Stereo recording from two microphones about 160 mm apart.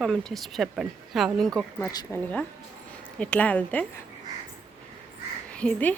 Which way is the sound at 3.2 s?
10° left (ahead or behind).